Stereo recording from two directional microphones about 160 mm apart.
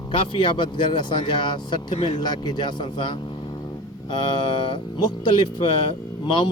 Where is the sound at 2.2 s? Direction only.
25° left (ahead or behind).